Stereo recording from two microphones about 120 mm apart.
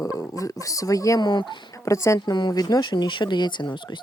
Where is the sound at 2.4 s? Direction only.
35° left (ahead or behind).